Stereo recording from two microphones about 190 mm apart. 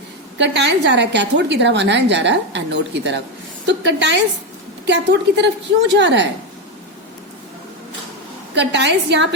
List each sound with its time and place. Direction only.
0.3 s a woman's voice: 65° right (ahead or behind)
8.5 s a woman's voice: 65° right (ahead or behind)